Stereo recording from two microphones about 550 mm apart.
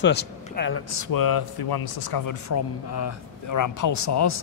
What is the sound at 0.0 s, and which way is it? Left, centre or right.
A man's voice, centre.